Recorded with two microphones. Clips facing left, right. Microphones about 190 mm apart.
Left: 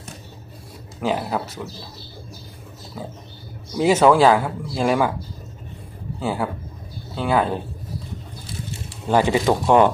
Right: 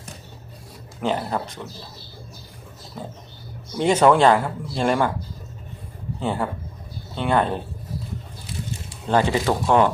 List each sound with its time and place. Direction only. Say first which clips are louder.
1.0 s speech: left 1 dB; 5° left (ahead or behind)
3.8 s speech: left 1 dB; 5° left (ahead or behind)
6.1 s speech: left 1 dB; 5° left (ahead or behind)
9.0 s speech: left 2 dB; 15° left (ahead or behind)